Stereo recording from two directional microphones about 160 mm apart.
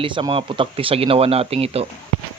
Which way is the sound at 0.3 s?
35° right (ahead or behind).